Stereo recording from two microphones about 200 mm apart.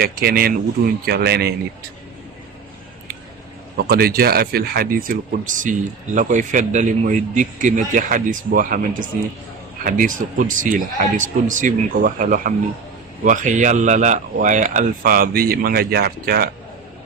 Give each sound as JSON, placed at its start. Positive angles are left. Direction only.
{"t": 0.0, "sound": "speech", "side_deg": -50}
{"t": 3.8, "sound": "speech", "side_deg": -50}